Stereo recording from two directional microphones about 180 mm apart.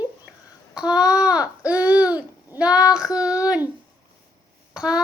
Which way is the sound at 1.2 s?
5° right (ahead or behind).